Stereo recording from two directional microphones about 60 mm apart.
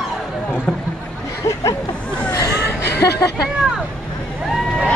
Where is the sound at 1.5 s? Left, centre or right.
Left.